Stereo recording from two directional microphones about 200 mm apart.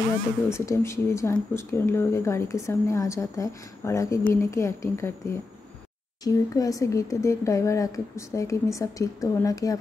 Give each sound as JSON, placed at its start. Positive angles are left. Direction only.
{"t": 0.5, "sound": "speech", "side_deg": 15}
{"t": 6.2, "sound": "speech", "side_deg": 15}